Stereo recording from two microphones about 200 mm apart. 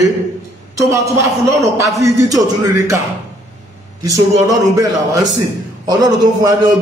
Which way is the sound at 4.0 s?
15° right (ahead or behind).